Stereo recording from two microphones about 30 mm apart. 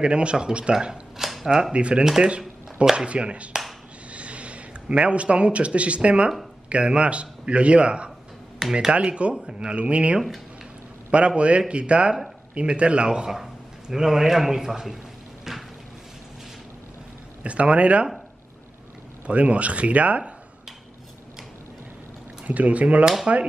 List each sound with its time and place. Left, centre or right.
0.0 s a man's voice: right
1.1 s a sound: centre
1.7 s a man's voice: right
2.8 s a man's voice: centre
3.1 s a man's voice: right
8.6 s speech: centre
9.0 s a man's voice: right
9.8 s a man's voice: right; by 15.0 s centre
17.4 s speech: right
19.2 s speech: right
22.5 s speech: right